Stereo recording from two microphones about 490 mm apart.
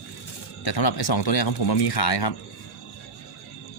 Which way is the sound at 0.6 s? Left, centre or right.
Left.